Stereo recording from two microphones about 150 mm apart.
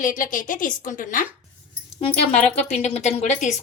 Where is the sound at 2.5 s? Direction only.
45° left (ahead or behind).